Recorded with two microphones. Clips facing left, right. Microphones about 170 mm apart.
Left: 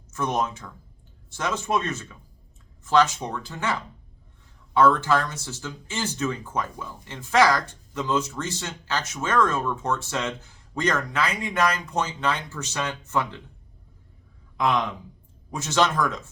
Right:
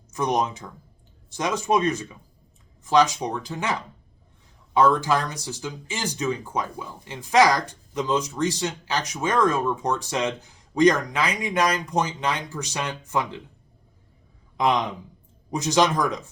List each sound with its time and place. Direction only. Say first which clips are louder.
0.1 s speech: right 2 dB; 15° right (ahead or behind)
14.5 s speech: right 1 dB; 20° right (ahead or behind)